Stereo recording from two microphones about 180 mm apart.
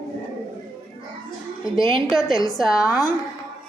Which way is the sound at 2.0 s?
Centre (ahead or behind).